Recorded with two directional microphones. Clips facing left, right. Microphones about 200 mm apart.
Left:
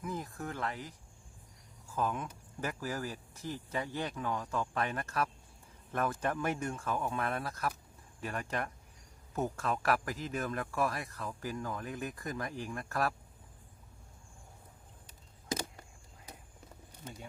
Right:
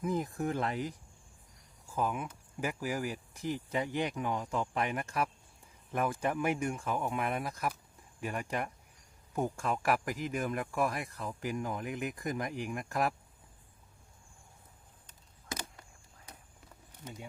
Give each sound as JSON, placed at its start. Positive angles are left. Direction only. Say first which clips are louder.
{"t": 0.0, "sound": "speech", "louder": "right 7 dB", "side_deg": -20}
{"t": 2.0, "sound": "speech", "louder": "right 1 dB", "side_deg": -10}